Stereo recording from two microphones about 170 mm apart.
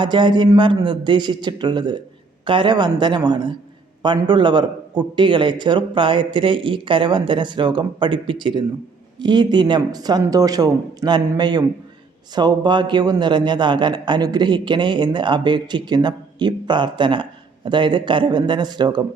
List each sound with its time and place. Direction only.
0.0 s a man's voice: 30° right (ahead or behind)